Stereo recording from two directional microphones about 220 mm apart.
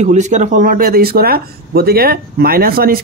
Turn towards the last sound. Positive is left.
turn(degrees=-40)  # may be behind; listen again after turning